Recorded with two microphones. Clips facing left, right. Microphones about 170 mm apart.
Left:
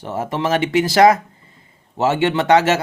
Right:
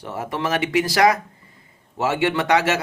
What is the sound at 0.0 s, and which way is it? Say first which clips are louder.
Speech: left 4 dB; 25° left (ahead or behind).